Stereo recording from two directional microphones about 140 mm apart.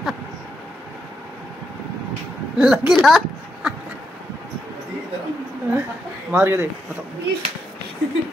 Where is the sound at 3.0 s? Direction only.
Centre (ahead or behind).